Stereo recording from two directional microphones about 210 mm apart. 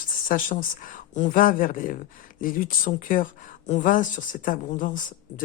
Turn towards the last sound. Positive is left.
turn(degrees=40)  # may be behind; listen again after turning